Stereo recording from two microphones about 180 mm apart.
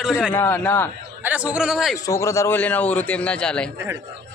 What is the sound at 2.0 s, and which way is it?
A man's voice, 15° left (ahead or behind).